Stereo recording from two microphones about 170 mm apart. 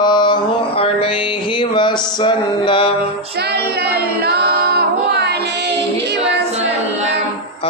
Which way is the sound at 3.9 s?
70° right (ahead or behind).